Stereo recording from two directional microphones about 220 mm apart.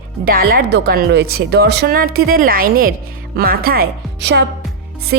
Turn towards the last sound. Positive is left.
turn(degrees=-50)  # may be behind; listen again after turning